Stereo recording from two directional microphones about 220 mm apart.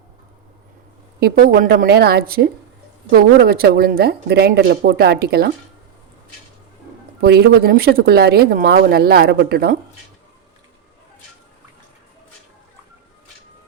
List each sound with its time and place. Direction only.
1.2 s speech: 40° right (ahead or behind)
7.2 s speech: 45° right (ahead or behind)